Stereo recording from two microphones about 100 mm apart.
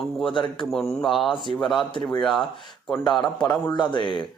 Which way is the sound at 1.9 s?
50° left (ahead or behind).